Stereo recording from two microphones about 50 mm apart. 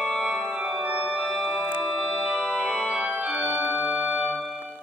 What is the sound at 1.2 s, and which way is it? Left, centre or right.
Organ, centre.